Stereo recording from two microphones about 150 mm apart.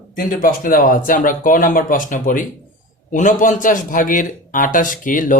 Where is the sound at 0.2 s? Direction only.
65° left (ahead or behind).